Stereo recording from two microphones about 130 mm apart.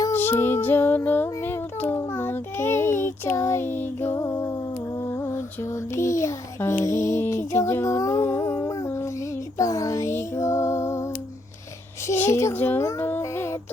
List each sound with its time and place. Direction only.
0.1 s music: 15° left (ahead or behind)
5.0 s lullaby: 20° left (ahead or behind)
5.9 s child singing: 20° left (ahead or behind)
9.6 s female singing: 25° left (ahead or behind)
12.0 s child singing: 20° left (ahead or behind)